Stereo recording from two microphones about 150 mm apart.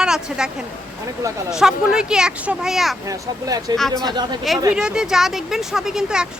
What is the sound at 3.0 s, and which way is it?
Speech, 25° right (ahead or behind).